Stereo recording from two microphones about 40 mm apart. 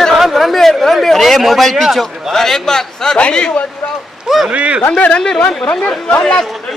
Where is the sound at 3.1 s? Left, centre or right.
Left.